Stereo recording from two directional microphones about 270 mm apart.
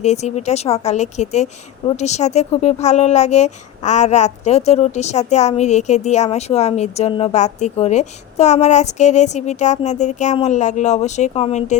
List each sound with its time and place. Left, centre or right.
0.0 s speech: left